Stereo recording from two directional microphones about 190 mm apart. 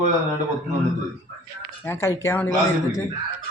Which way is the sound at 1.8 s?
15° left (ahead or behind).